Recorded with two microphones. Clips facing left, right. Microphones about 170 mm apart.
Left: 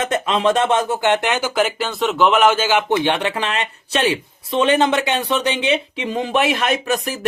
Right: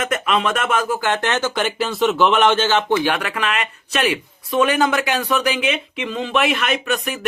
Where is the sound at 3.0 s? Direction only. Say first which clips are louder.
Left 2 dB; 25° left (ahead or behind).